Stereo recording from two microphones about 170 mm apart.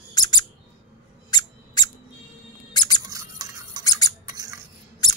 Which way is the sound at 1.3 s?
25° left (ahead or behind).